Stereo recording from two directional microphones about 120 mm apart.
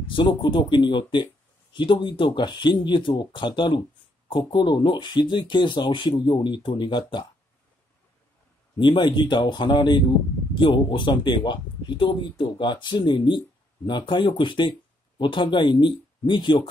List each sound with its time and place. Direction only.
0.0 s speech: 45° left (ahead or behind)
8.7 s speech: 40° left (ahead or behind)